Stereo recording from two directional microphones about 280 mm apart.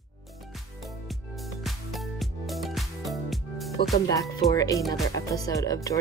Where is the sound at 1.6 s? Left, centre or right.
Centre.